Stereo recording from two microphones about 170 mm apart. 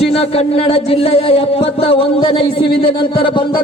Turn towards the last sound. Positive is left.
turn(degrees=30)  # may be behind; listen again after turning